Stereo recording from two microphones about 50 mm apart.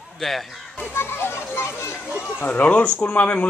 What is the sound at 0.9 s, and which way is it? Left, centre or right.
A child's voice, left.